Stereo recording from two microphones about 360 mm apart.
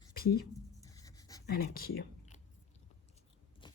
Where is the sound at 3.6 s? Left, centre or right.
Centre.